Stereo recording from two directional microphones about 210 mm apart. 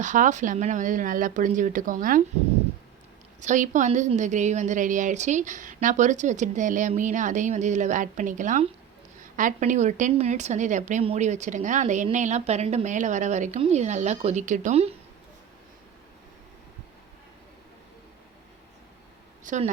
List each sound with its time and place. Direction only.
0.0 s speech: 35° right (ahead or behind)
3.4 s speech: 35° right (ahead or behind)
19.5 s speech: 35° right (ahead or behind)